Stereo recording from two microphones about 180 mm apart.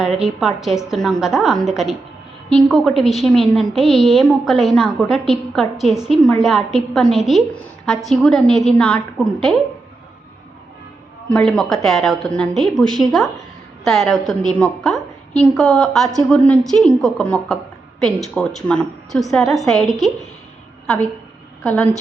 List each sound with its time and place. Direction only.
0.0 s a woman's voice: 5° right (ahead or behind)
11.3 s a woman's voice: 5° left (ahead or behind)